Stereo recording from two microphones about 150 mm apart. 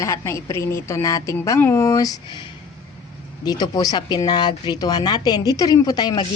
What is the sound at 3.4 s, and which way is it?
A woman's voice, 25° left (ahead or behind).